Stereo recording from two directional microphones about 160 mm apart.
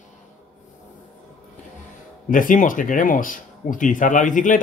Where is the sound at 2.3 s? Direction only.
55° left (ahead or behind).